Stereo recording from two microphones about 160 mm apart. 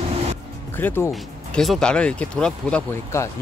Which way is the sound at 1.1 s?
Centre (ahead or behind).